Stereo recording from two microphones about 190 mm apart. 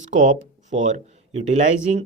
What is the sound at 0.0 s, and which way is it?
Speech, 40° right (ahead or behind).